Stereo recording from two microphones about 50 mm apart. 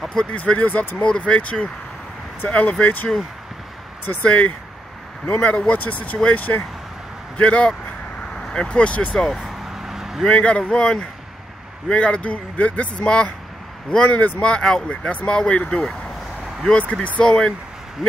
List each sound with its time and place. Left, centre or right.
0.1 s speech: centre
0.4 s a man's voice: left
1.0 s a man's voice: centre
4.2 s a man's voice: left
9.7 s vehicle: centre
10.2 s a man's voice: left
14.4 s a man's voice: centre
17.2 s speech: centre